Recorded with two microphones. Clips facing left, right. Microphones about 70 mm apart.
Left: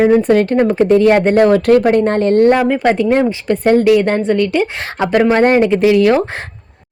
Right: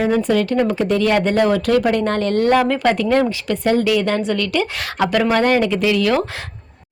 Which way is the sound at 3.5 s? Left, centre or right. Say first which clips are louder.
Left 7 dB; left.